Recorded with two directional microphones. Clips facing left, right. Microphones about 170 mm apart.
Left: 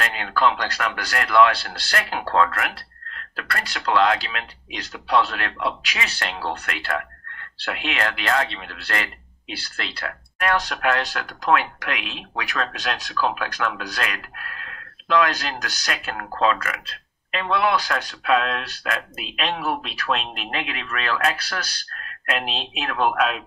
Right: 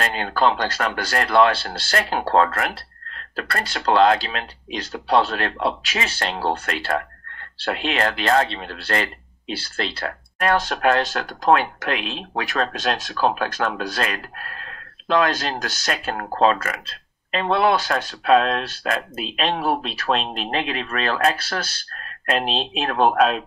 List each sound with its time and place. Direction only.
0.0 s speech: 35° right (ahead or behind)